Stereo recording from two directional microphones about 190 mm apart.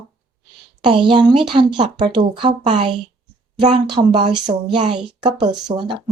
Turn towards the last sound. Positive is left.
turn(degrees=-25)  # may be behind; listen again after turning